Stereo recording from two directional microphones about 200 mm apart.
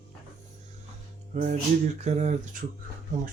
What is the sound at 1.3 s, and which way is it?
Speech, 35° right (ahead or behind).